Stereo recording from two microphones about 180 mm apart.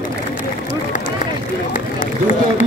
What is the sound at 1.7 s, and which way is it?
Run, 45° left (ahead or behind).